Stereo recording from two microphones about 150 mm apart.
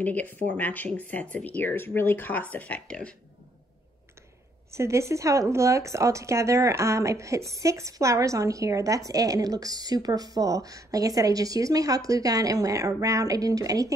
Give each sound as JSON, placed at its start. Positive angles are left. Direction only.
{"t": 0.0, "sound": "speech", "side_deg": 10}
{"t": 4.6, "sound": "speech", "side_deg": -20}